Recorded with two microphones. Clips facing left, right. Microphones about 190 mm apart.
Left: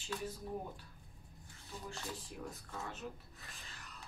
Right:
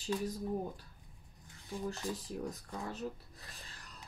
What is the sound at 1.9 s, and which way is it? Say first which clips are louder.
Speech: right 6 dB; 40° right (ahead or behind).